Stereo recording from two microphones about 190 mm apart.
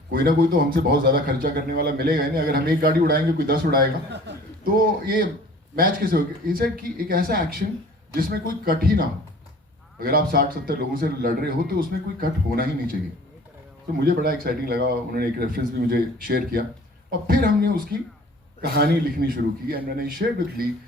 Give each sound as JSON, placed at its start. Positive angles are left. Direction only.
{"t": 0.1, "sound": "a man's voice", "side_deg": -50}
{"t": 8.6, "sound": "a man's voice", "side_deg": -50}
{"t": 14.0, "sound": "a man's voice", "side_deg": -50}